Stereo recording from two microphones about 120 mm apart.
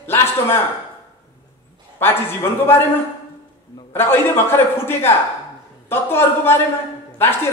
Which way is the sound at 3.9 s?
20° left (ahead or behind).